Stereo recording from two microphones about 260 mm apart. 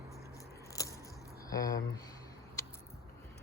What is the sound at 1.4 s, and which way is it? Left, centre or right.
Speech, centre.